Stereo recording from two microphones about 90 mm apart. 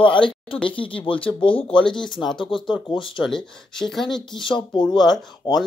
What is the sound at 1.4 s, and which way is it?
Speech, 85° left.